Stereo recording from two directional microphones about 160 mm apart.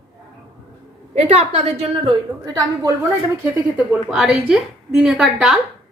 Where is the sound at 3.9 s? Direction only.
5° right (ahead or behind).